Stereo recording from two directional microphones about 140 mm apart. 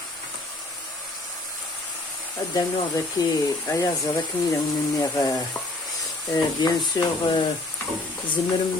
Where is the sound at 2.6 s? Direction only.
25° left (ahead or behind).